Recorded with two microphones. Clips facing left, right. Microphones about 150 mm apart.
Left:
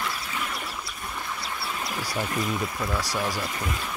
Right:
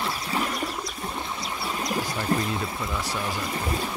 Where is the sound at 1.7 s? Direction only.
40° right (ahead or behind).